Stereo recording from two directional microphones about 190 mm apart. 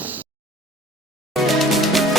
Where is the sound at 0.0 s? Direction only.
10° right (ahead or behind).